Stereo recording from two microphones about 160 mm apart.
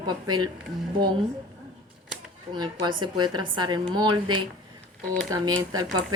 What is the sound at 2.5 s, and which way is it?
A woman's voice, 25° right (ahead or behind).